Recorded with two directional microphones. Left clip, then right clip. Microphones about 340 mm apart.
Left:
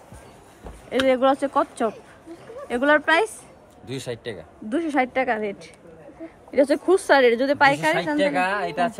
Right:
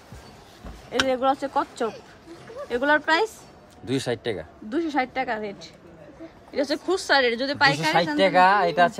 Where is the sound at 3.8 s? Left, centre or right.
Right.